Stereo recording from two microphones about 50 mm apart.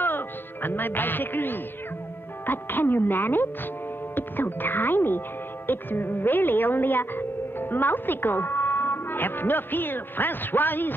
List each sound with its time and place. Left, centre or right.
0.0 s music: left
2.4 s speech: left